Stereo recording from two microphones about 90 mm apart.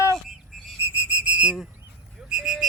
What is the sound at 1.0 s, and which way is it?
Whistle, 15° right (ahead or behind).